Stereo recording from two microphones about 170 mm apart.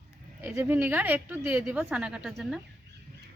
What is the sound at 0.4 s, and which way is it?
A woman's voice, 10° right (ahead or behind).